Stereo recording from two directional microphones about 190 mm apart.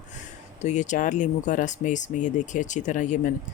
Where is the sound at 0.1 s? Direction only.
40° left (ahead or behind).